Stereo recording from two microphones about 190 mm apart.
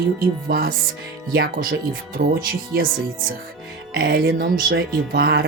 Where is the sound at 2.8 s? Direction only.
50° right (ahead or behind).